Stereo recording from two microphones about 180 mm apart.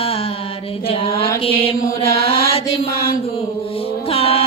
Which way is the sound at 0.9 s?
30° left (ahead or behind).